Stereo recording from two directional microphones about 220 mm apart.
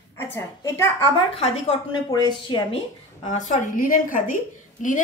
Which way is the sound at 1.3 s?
25° left (ahead or behind).